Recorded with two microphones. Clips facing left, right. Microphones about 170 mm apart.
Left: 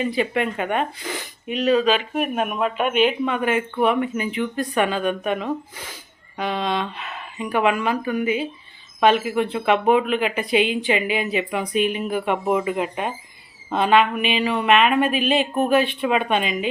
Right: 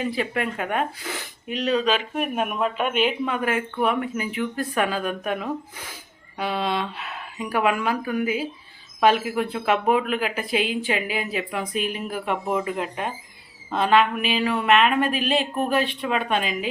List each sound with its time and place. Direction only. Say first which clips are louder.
0.0 s a woman's voice: left 3 dB; centre (ahead or behind)